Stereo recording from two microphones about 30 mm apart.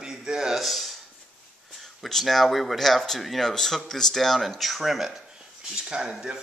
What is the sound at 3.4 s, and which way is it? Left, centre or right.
Speech, centre.